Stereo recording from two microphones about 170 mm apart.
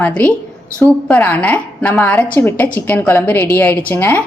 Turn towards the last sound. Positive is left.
turn(degrees=10)  # may be behind; listen again after turning